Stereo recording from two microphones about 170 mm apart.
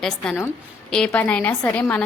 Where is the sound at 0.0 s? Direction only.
5° left (ahead or behind).